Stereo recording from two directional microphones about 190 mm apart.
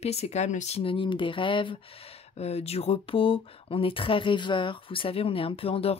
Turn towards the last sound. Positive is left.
turn(degrees=30)  # may be behind; listen again after turning